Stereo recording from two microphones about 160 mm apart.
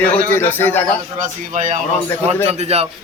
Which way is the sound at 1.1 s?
55° right (ahead or behind).